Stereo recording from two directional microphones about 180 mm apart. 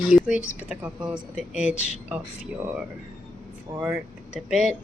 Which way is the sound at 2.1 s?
10° right (ahead or behind).